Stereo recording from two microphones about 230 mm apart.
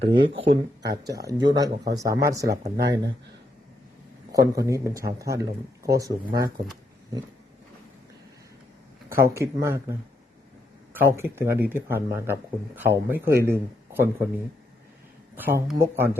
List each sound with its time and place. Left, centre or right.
0.0 s speech: right
1.3 s speech: centre
4.3 s speech: centre
9.0 s speech: centre
10.9 s speech: centre
15.4 s speech: centre